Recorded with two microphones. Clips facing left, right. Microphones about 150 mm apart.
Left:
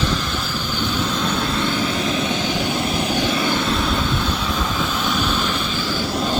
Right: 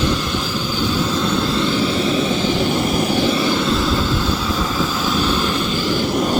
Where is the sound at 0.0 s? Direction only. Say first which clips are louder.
Right 3 dB; 5° right (ahead or behind).